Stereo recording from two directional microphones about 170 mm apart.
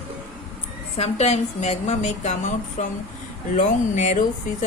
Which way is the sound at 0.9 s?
40° left (ahead or behind).